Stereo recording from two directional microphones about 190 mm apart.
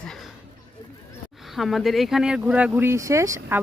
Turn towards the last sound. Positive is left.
turn(degrees=-15)  # may be behind; listen again after turning